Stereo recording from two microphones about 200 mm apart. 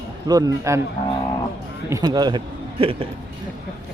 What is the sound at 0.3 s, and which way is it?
Speech, 20° right (ahead or behind).